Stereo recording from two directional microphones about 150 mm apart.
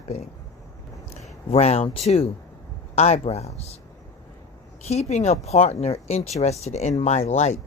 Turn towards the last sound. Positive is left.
turn(degrees=50)  # may be behind; listen again after turning